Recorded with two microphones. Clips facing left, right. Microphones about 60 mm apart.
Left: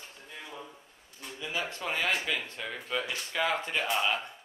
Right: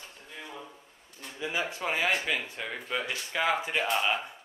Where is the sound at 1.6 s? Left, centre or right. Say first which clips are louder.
Right 2 dB; centre.